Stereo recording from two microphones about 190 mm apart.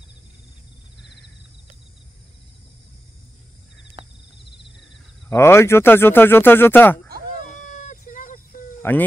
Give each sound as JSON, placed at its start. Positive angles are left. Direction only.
{"t": 4.0, "sound": "cricket", "side_deg": -30}
{"t": 5.3, "sound": "speech", "side_deg": 15}
{"t": 7.2, "sound": "a sound", "side_deg": 40}
{"t": 8.8, "sound": "speech", "side_deg": 10}